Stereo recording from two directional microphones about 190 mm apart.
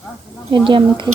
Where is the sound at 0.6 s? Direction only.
25° right (ahead or behind).